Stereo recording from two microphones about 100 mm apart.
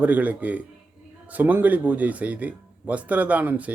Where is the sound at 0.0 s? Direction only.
15° right (ahead or behind).